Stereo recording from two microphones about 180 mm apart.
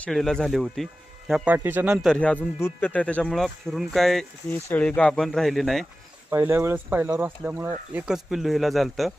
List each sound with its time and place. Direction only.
0.0 s speech: centre (ahead or behind)
1.3 s speech: 10° right (ahead or behind)
2.0 s speech: 5° left (ahead or behind)
6.3 s speech: 10° right (ahead or behind)